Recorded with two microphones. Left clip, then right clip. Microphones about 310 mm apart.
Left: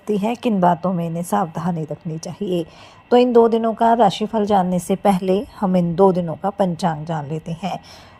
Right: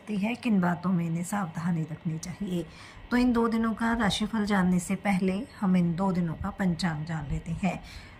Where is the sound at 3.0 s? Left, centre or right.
Centre.